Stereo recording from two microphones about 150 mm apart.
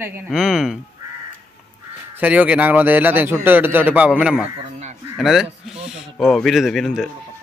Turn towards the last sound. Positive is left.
turn(degrees=0)  # may be behind; listen again after turning